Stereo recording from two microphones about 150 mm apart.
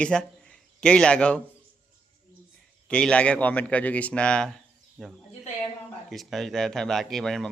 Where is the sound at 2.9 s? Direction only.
5° left (ahead or behind).